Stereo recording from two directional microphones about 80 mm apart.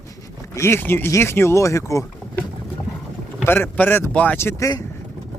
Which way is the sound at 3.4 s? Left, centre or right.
Left.